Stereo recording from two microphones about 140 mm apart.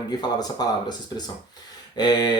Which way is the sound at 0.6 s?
30° left (ahead or behind).